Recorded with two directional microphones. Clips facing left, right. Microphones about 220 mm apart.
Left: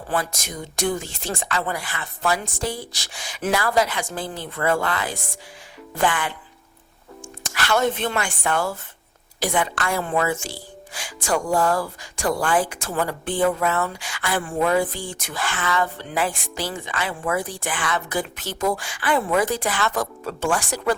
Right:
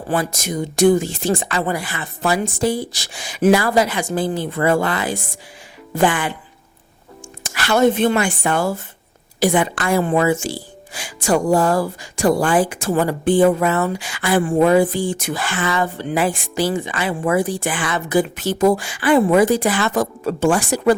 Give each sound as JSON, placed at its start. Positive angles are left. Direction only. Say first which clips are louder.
{"t": 0.1, "sound": "speech", "louder": "right 6 dB", "side_deg": -5}
{"t": 7.4, "sound": "a woman's voice", "louder": "right 6 dB", "side_deg": -5}
{"t": 9.6, "sound": "speech", "louder": "right 6 dB", "side_deg": -15}
{"t": 11.6, "sound": "speech", "louder": "right 4 dB", "side_deg": -35}
{"t": 12.3, "sound": "speech", "louder": "right 5 dB", "side_deg": -20}
{"t": 12.5, "sound": "speech", "louder": "right 6 dB", "side_deg": -5}